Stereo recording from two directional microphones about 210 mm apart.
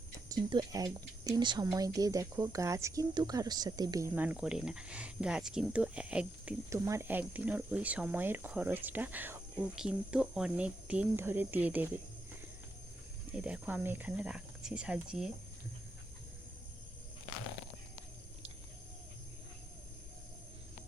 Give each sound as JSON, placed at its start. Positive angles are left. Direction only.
{"t": 0.3, "sound": "speech", "side_deg": -15}
{"t": 13.3, "sound": "speech", "side_deg": -5}